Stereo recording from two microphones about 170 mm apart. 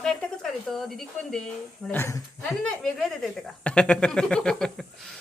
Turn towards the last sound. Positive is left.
turn(degrees=5)  # may be behind; listen again after turning